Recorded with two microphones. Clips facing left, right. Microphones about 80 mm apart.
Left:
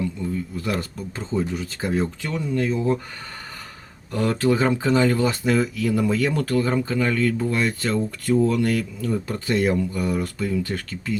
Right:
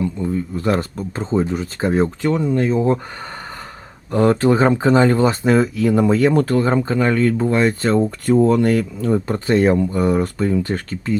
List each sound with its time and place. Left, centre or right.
0.0 s speech: right
4.1 s speech: right